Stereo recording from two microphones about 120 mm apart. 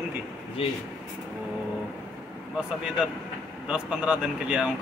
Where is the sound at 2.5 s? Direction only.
5° right (ahead or behind).